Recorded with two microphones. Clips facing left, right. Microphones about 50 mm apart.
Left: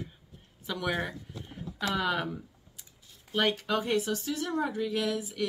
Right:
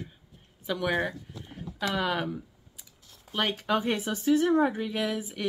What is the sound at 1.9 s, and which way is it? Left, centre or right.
Speech, centre.